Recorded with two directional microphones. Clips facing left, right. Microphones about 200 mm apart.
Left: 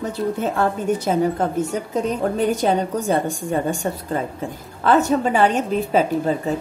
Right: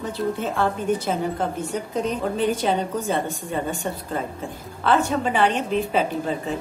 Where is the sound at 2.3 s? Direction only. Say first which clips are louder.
Left 3 dB; 45° left (ahead or behind).